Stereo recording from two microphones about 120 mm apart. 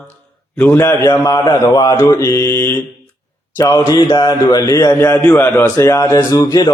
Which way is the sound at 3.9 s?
35° left (ahead or behind).